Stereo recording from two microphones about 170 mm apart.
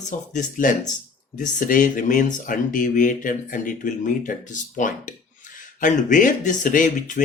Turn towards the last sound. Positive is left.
turn(degrees=50)  # may be behind; listen again after turning